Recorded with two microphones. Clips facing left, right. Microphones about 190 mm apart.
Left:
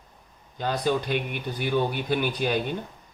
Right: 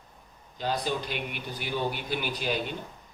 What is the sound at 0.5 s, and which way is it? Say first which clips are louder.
Speech: left 2 dB; 55° left (ahead or behind).